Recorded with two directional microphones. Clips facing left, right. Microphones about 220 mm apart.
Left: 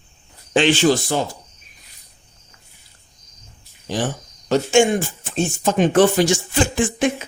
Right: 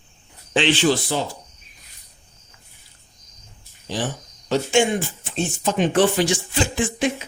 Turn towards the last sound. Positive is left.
turn(degrees=50)  # may be behind; listen again after turning